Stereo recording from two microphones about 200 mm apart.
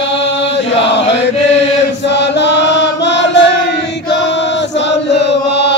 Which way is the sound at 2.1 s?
60° left (ahead or behind).